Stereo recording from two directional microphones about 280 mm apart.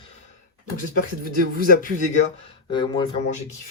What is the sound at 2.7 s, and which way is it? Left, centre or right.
Speech, centre.